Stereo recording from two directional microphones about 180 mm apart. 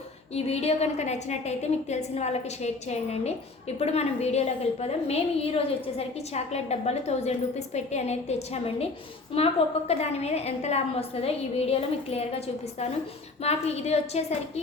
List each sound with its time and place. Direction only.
0.3 s a woman's voice: 35° left (ahead or behind)
13.4 s a woman's voice: 35° left (ahead or behind)